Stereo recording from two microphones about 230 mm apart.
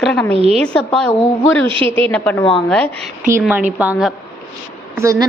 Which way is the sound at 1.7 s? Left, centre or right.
Right.